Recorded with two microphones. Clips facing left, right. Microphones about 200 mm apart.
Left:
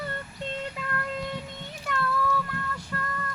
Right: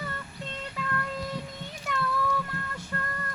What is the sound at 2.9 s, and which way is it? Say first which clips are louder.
Music: even; 20° right (ahead or behind).